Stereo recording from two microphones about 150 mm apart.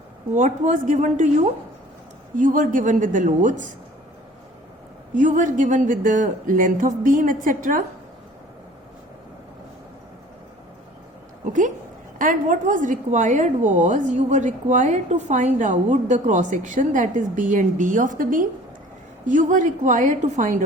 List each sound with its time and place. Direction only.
0.3 s a woman's voice: 55° right (ahead or behind)
5.1 s a woman's voice: 55° right (ahead or behind)
12.2 s a woman's voice: 60° right (ahead or behind)